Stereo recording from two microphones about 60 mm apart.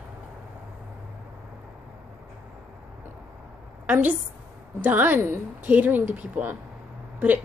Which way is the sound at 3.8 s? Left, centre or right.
Right.